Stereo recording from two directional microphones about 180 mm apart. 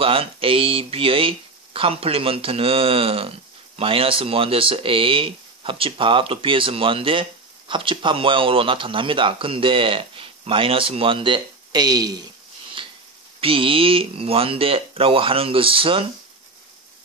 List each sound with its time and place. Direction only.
0.0 s speech: 30° right (ahead or behind)
13.4 s speech: 30° right (ahead or behind)